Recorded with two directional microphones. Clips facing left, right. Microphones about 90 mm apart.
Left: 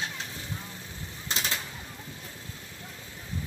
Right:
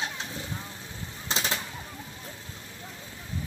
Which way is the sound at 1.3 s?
20° right (ahead or behind).